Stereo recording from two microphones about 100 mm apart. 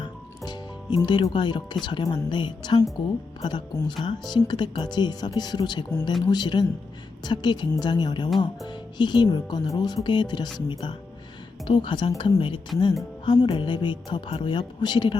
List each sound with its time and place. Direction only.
0.0 s a woman's voice: 45° left (ahead or behind)